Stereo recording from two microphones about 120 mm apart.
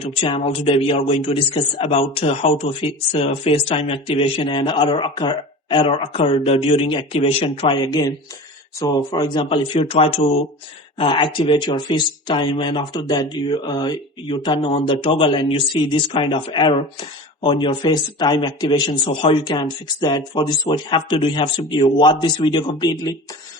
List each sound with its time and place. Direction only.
0.0 s a man's voice: 50° left (ahead or behind)
4.4 s a man's voice: 40° left (ahead or behind)
7.9 s speech: 35° left (ahead or behind)
9.9 s a man's voice: 50° left (ahead or behind); by 23.1 s 35° left (ahead or behind)